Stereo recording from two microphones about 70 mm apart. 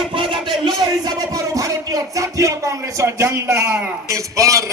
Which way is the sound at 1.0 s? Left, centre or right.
Right.